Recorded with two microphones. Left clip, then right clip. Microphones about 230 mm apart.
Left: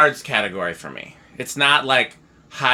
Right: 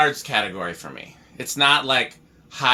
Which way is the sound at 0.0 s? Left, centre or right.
Left.